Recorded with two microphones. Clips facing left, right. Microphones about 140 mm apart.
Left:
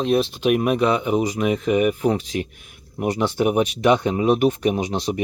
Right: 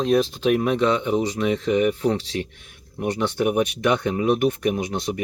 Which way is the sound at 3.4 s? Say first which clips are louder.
Left 2 dB; 20° left (ahead or behind).